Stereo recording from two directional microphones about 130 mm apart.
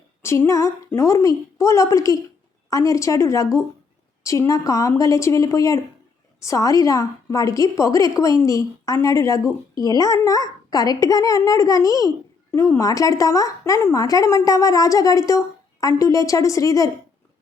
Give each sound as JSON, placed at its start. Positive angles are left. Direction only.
{"t": 0.2, "sound": "a child's voice", "side_deg": 20}